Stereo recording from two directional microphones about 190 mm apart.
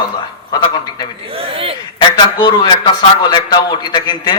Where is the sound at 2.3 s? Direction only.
20° left (ahead or behind).